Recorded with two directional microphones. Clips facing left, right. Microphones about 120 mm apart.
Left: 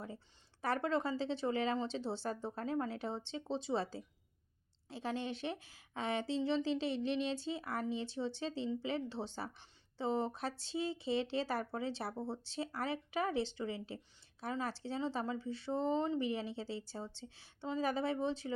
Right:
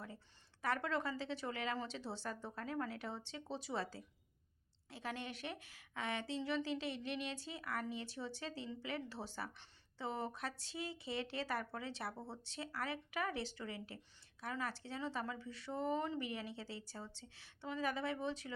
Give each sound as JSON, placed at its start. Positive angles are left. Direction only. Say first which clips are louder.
{"t": 0.6, "sound": "a woman's voice", "louder": "left 4 dB", "side_deg": 30}